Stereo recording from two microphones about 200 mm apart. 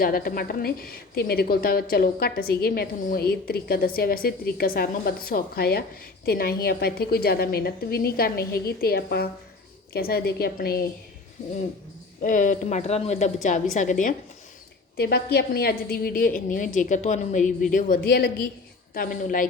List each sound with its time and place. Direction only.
0.0 s a woman's voice: 45° left (ahead or behind)
12.2 s a woman's voice: 40° left (ahead or behind)
14.9 s a woman's voice: 50° left (ahead or behind)